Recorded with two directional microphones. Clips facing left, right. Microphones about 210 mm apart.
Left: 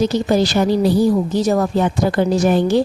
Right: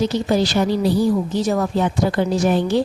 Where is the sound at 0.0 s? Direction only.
45° left (ahead or behind).